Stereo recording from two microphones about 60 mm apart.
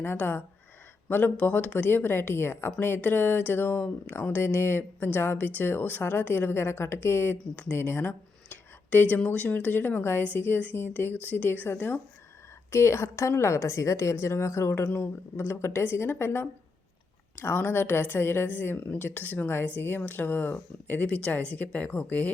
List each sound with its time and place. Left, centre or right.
0.0 s a woman's voice: left
14.9 s a woman's voice: left